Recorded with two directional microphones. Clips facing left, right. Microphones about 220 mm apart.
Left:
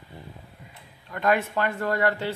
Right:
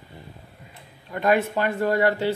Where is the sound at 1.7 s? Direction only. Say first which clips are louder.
Right 5 dB; 30° right (ahead or behind).